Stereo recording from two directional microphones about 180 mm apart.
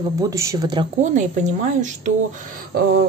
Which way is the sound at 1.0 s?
40° right (ahead or behind).